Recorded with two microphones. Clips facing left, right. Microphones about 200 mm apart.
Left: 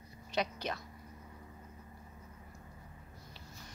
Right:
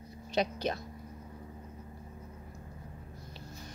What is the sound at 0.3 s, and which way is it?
Speech, 35° right (ahead or behind).